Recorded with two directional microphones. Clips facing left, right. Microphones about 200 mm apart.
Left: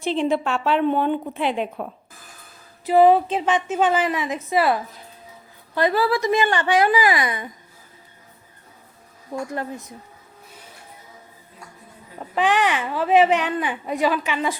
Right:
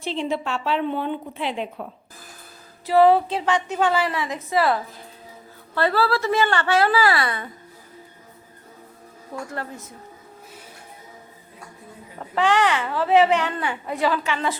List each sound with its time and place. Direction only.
0.0 s a woman's voice: 55° left (ahead or behind)
2.8 s a woman's voice: 15° left (ahead or behind)
9.5 s a woman's voice: 15° left (ahead or behind)
12.3 s a woman's voice: 15° left (ahead or behind)